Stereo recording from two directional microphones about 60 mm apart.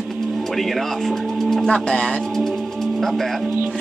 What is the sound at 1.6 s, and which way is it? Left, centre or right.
Speech, centre.